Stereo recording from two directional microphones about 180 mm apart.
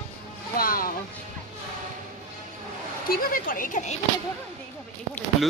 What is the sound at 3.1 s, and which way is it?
Speech, 50° left (ahead or behind).